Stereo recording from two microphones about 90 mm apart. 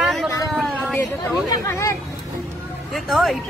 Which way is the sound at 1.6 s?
35° left (ahead or behind).